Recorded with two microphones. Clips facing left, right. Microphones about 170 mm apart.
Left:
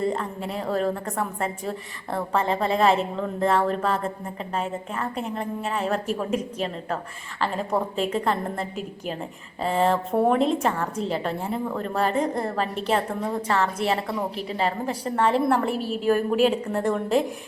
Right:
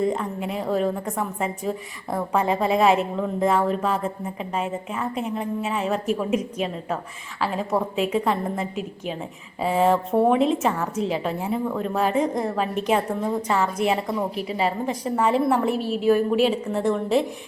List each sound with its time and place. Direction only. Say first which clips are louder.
0.0 s a woman's voice: right 2 dB; 10° right (ahead or behind)
15.7 s a woman's voice: right 2 dB; 40° left (ahead or behind)
16.0 s a woman's voice: right 1 dB; centre (ahead or behind)